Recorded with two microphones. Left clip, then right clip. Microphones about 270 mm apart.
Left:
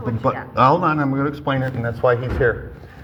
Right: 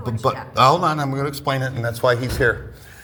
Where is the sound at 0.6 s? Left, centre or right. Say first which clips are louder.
Even; right.